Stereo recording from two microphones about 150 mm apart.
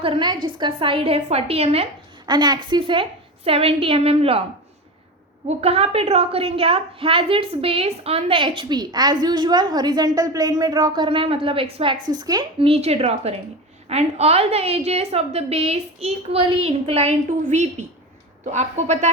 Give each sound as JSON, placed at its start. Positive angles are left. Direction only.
{"t": 0.0, "sound": "a woman's voice", "side_deg": -35}
{"t": 2.2, "sound": "a woman's voice", "side_deg": -30}
{"t": 5.5, "sound": "a woman's voice", "side_deg": -45}
{"t": 12.1, "sound": "a woman's voice", "side_deg": -25}
{"t": 12.5, "sound": "a woman's voice", "side_deg": -40}